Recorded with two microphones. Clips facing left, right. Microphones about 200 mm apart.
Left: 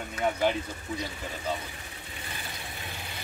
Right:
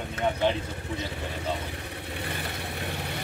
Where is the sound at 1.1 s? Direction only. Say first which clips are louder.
Right 2 dB; 60° right (ahead or behind).